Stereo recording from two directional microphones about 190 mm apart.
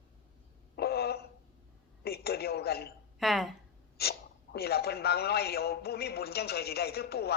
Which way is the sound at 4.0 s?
55° left (ahead or behind).